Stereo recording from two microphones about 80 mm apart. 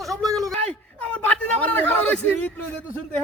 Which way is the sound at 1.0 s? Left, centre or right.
Centre.